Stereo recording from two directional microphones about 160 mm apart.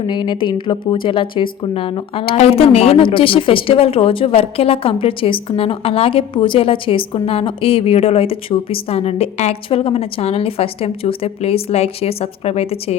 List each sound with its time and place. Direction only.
0.0 s a woman's voice: 30° left (ahead or behind)